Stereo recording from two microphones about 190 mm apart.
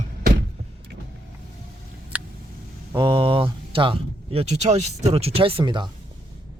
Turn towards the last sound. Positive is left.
turn(degrees=-25)  # may be behind; listen again after turning